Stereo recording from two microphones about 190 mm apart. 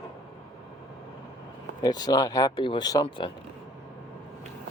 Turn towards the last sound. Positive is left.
turn(degrees=20)  # may be behind; listen again after turning